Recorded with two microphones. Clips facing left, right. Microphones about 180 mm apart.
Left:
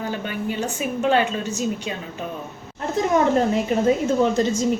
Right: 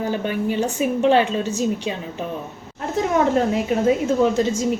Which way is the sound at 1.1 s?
30° right (ahead or behind).